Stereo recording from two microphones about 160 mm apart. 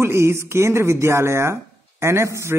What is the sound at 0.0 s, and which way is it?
Speech, 15° right (ahead or behind).